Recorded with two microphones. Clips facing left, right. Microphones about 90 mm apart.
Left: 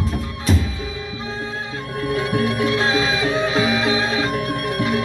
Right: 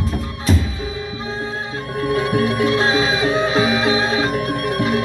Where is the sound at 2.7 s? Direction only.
20° right (ahead or behind).